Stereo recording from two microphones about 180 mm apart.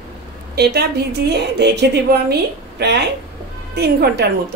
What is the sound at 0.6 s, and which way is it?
A woman's voice, 65° right (ahead or behind).